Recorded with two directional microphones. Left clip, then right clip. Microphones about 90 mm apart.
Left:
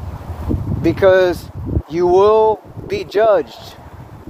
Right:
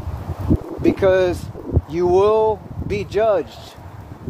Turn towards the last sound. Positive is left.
turn(degrees=45)  # may be behind; listen again after turning